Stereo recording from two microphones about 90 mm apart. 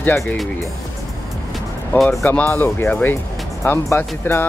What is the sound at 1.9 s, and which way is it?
Speech, 20° left (ahead or behind).